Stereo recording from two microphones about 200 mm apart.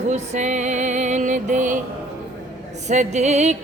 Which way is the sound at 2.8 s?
35° right (ahead or behind).